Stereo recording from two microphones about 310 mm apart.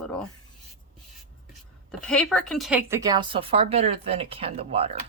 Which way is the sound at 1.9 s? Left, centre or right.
Centre.